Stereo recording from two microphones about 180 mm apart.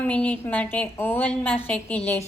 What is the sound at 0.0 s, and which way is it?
A woman's voice, 5° left (ahead or behind).